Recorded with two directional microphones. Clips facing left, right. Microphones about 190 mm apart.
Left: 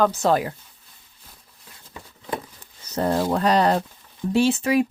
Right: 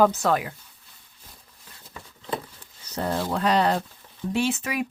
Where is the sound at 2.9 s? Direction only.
45° left (ahead or behind).